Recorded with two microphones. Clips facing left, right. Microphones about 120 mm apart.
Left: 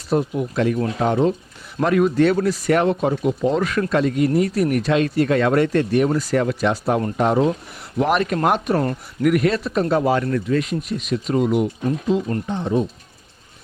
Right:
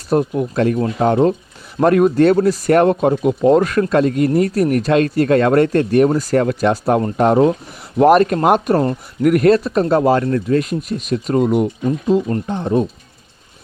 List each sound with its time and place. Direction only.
0.1 s speech: 50° right (ahead or behind)